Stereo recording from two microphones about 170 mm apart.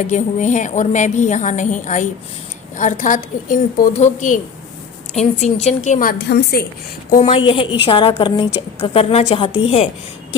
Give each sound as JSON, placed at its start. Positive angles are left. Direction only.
{"t": 0.1, "sound": "a woman's voice", "side_deg": 45}
{"t": 7.2, "sound": "a woman's voice", "side_deg": 35}
{"t": 9.5, "sound": "a woman's voice", "side_deg": 90}